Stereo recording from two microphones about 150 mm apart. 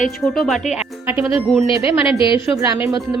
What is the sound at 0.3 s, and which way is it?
Speech, centre (ahead or behind).